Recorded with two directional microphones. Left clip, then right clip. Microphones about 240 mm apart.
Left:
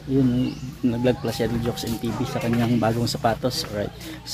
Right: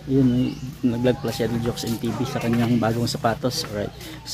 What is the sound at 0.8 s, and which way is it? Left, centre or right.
Speech, centre.